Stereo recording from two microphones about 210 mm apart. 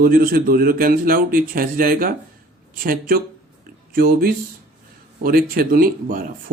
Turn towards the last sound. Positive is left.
turn(degrees=-40)  # may be behind; listen again after turning